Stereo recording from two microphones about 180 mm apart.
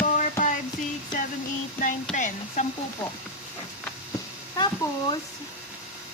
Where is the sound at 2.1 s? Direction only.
45° left (ahead or behind).